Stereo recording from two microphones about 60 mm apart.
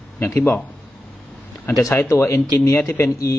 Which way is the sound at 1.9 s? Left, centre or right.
Left.